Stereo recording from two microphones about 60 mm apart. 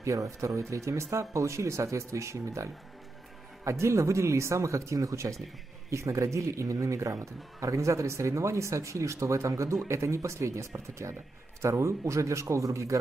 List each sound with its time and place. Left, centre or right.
0.0 s speech: right